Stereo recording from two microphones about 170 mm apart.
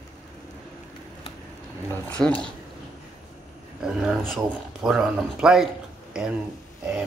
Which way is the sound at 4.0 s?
5° right (ahead or behind).